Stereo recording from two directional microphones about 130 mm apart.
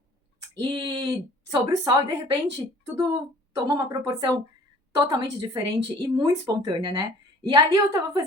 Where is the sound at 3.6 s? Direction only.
30° right (ahead or behind).